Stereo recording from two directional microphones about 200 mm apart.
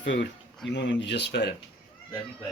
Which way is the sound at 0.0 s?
65° left (ahead or behind).